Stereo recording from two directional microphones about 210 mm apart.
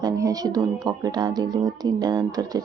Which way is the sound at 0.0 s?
15° right (ahead or behind).